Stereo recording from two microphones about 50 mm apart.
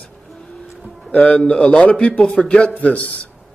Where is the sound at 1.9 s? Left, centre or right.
Centre.